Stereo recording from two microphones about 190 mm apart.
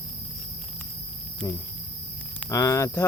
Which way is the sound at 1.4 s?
10° left (ahead or behind).